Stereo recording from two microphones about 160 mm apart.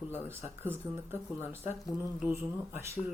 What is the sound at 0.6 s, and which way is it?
Speech, 15° right (ahead or behind).